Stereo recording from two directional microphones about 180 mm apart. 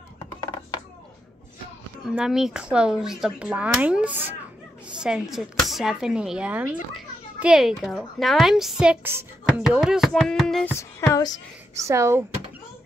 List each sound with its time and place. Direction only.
2.0 s speech: centre (ahead or behind)
10.7 s music: 15° left (ahead or behind)
11.7 s speech: 15° right (ahead or behind)